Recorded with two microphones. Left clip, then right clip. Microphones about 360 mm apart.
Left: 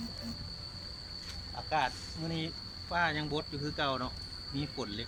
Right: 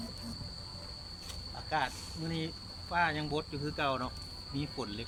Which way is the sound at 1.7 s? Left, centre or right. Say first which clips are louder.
Left 2 dB; centre.